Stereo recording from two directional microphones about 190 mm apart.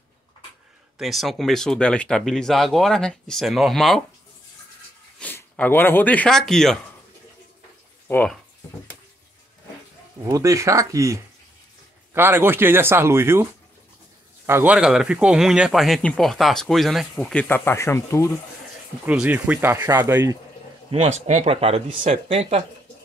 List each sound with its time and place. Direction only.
0.9 s speech: centre (ahead or behind)
5.2 s speech: 10° left (ahead or behind)
8.1 s speech: 10° left (ahead or behind)
10.2 s speech: 15° right (ahead or behind); by 18.3 s 15° left (ahead or behind)
19.0 s speech: 10° right (ahead or behind)
20.9 s speech: 35° right (ahead or behind)